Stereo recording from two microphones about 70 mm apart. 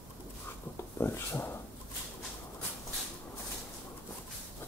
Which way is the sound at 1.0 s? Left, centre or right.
Left.